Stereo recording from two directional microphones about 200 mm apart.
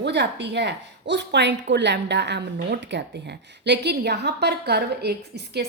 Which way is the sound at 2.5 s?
50° right (ahead or behind).